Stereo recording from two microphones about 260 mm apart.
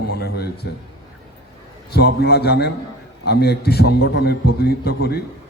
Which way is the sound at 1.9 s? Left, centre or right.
Left.